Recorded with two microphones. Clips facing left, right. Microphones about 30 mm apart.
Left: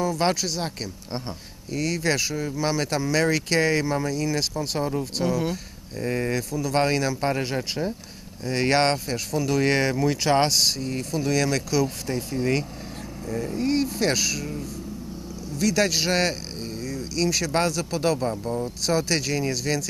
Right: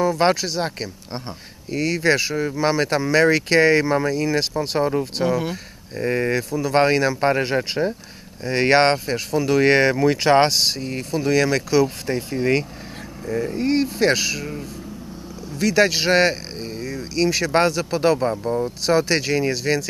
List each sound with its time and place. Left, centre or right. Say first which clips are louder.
0.1 s a man's voice: right 5 dB; right